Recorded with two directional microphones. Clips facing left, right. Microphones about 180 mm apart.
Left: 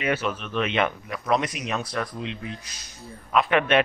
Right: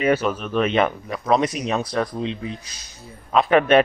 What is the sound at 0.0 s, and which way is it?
Speech, 45° right (ahead or behind).